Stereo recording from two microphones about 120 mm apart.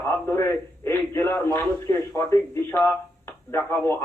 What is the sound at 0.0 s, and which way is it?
A man's voice, 20° left (ahead or behind).